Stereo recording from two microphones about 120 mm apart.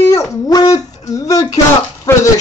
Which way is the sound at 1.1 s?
30° left (ahead or behind).